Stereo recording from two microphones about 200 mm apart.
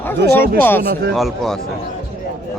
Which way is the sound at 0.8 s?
55° right (ahead or behind).